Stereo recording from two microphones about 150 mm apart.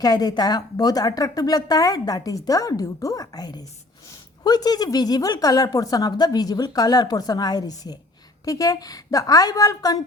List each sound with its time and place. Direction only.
0.0 s a woman's voice: 25° left (ahead or behind)